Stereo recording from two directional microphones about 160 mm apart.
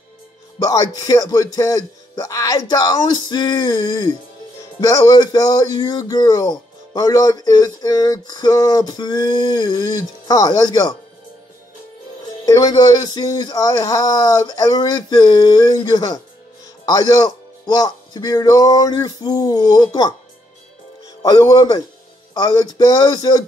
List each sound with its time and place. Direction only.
0.6 s speech: 20° left (ahead or behind)
12.5 s speech: 20° left (ahead or behind)
21.2 s speech: 25° left (ahead or behind)